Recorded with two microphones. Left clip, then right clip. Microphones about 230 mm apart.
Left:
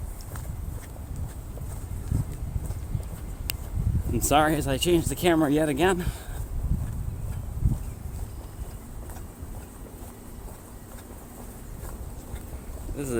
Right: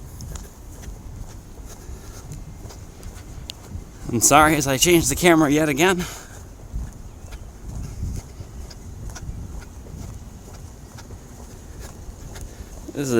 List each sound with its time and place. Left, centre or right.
4.1 s speech: right